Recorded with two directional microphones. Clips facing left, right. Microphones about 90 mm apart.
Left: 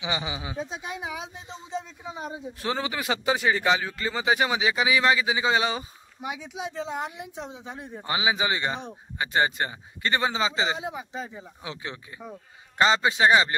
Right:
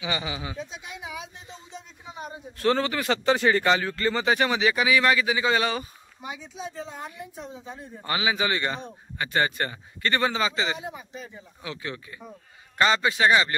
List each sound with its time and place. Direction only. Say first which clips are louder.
0.0 s a man's voice: even; 20° left (ahead or behind)
0.7 s speech: left 5 dB; 30° left (ahead or behind)
2.3 s a man's voice: right 8 dB; 15° left (ahead or behind)
6.2 s speech: left 3 dB; 80° left
8.0 s speech: even; 20° left (ahead or behind)
10.9 s speech: left 4 dB; 90° left
11.6 s speech: right 3 dB; 25° left (ahead or behind)